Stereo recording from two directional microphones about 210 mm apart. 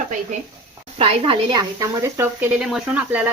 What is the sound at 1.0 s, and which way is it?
Speech, 25° right (ahead or behind).